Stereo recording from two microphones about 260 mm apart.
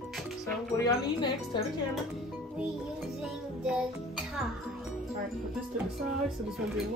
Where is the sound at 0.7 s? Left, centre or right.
Centre.